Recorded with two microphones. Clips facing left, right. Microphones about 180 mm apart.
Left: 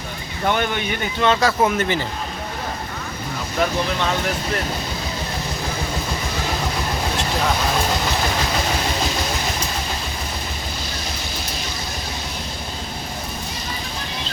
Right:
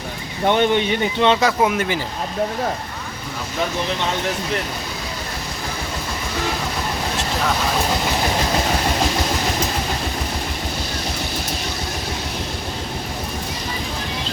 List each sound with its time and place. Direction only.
0.4 s speech: 25° right (ahead or behind)
1.6 s speech: 10° right (ahead or behind)